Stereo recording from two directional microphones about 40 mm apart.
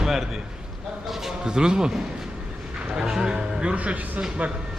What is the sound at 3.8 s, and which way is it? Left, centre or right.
Speech, right.